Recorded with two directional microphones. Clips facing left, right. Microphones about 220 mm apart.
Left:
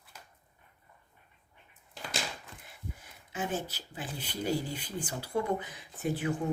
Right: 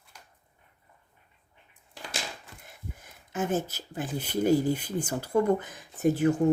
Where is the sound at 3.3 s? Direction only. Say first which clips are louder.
Right 6 dB; 45° right (ahead or behind).